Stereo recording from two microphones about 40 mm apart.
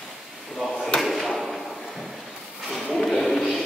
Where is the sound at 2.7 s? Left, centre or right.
Centre.